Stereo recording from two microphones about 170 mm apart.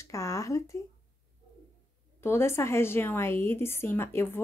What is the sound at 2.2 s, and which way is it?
A woman's voice, 15° left (ahead or behind).